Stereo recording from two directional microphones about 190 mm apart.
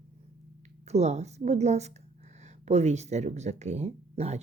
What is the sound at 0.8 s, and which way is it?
Speech, 35° right (ahead or behind).